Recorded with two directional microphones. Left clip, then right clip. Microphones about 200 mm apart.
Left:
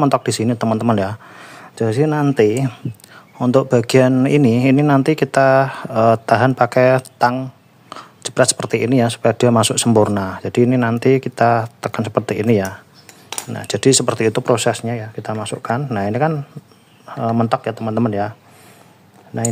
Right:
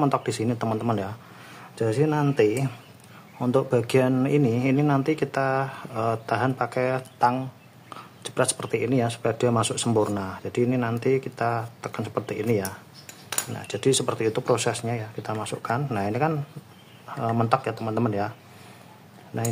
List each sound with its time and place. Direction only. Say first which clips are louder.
0.0 s speech: left 8 dB; 40° left (ahead or behind)